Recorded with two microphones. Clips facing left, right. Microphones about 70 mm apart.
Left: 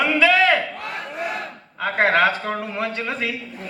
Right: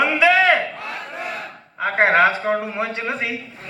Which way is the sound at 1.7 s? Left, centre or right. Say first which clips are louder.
Right 2 dB; centre.